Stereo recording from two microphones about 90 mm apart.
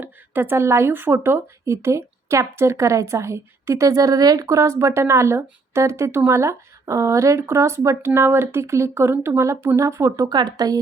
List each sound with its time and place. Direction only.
0.0 s speech: 25° right (ahead or behind)
10.2 s speech: 50° right (ahead or behind)